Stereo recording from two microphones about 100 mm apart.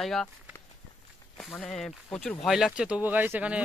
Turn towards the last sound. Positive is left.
turn(degrees=-15)  # may be behind; listen again after turning